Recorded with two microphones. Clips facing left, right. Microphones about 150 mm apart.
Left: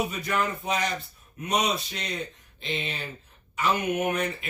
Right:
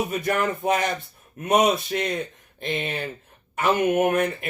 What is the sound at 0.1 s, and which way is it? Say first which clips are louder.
Speech: right 5 dB; 50° right (ahead or behind).